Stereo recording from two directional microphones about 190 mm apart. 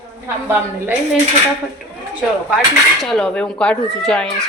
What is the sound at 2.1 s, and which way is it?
Cutlery, centre (ahead or behind).